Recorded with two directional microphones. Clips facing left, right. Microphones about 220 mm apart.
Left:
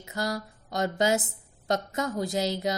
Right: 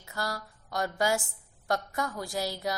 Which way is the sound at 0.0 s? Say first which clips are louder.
Left 5 dB; 20° left (ahead or behind).